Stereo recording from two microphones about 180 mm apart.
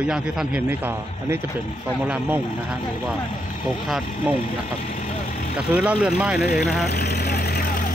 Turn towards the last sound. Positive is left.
turn(degrees=55)  # may be behind; listen again after turning